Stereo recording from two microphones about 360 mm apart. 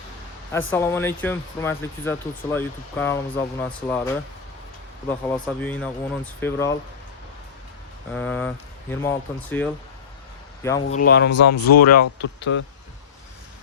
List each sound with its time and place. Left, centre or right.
0.7 s speech: centre
8.1 s a man's voice: centre
10.9 s speech: left